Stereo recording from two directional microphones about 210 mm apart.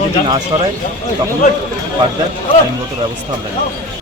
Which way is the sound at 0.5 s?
25° right (ahead or behind).